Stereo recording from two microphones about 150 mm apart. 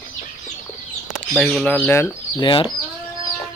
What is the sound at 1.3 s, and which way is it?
Speech, centre (ahead or behind).